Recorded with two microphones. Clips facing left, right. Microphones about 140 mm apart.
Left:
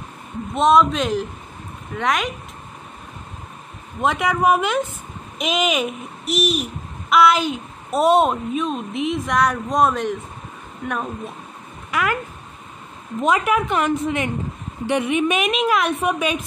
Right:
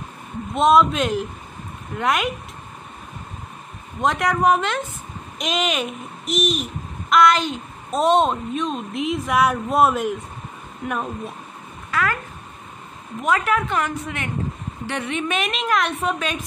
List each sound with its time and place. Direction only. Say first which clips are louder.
0.6 s a child's voice: even; centre (ahead or behind)
4.0 s a woman's voice: even; centre (ahead or behind)
11.9 s speech: left 1 dB; 15° left (ahead or behind)
13.2 s a woman's voice: left 2 dB; 15° left (ahead or behind)